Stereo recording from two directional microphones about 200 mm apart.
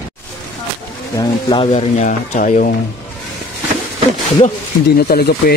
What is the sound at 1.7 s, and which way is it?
Speech, 35° left (ahead or behind).